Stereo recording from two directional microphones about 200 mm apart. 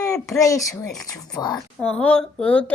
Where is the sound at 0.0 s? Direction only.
15° left (ahead or behind).